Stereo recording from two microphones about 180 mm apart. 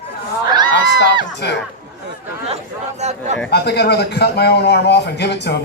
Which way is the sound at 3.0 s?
40° right (ahead or behind).